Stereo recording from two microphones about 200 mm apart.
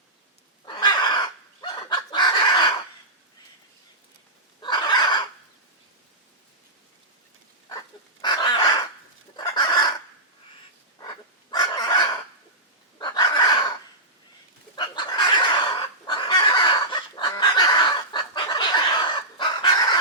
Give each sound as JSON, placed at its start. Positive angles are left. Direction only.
{"t": 0.6, "sound": "chicken", "side_deg": 20}
{"t": 4.6, "sound": "a sound", "side_deg": 20}
{"t": 8.2, "sound": "bird", "side_deg": 20}
{"t": 9.3, "sound": "chicken", "side_deg": 20}
{"t": 11.5, "sound": "fowl", "side_deg": 20}
{"t": 13.0, "sound": "chicken", "side_deg": 20}
{"t": 14.8, "sound": "chicken", "side_deg": 20}